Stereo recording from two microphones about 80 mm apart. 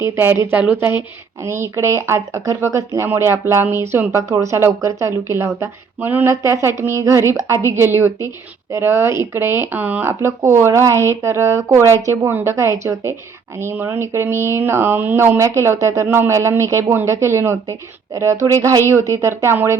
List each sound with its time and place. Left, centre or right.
0.0 s speech: right
4.1 s speech: right
6.2 s speech: right